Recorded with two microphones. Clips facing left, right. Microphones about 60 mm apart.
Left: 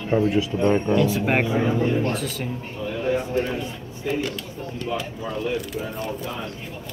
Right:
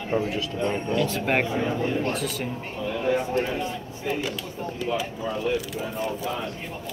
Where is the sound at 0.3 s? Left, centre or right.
Centre.